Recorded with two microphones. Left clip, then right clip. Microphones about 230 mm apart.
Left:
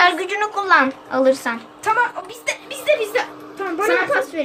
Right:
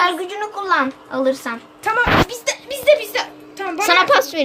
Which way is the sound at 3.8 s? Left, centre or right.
Right.